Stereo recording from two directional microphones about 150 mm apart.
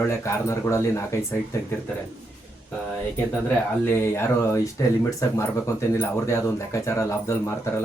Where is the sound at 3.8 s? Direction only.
15° left (ahead or behind).